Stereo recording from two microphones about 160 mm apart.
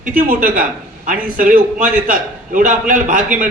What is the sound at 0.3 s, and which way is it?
A man's voice, 60° right (ahead or behind).